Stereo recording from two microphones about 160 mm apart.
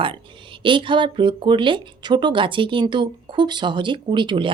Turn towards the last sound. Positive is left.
turn(degrees=-30)  # may be behind; listen again after turning